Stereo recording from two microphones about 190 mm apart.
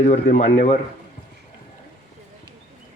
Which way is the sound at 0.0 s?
40° left (ahead or behind).